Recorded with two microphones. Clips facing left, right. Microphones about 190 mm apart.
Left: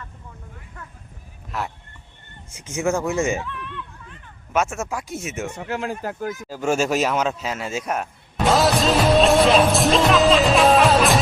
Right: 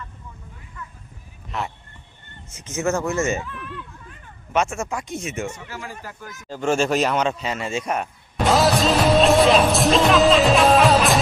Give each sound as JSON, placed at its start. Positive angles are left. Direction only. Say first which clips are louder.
{"t": 1.5, "sound": "speech", "louder": "even", "side_deg": 0}
{"t": 2.5, "sound": "speech", "louder": "left 1 dB", "side_deg": 10}
{"t": 4.5, "sound": "speech", "louder": "even", "side_deg": 5}
{"t": 5.5, "sound": "speech", "louder": "left 9 dB", "side_deg": 60}
{"t": 6.5, "sound": "speech", "louder": "right 1 dB", "side_deg": 10}